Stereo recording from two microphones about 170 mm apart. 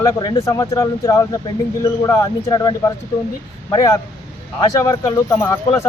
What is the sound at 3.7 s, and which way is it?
Speech, 20° left (ahead or behind).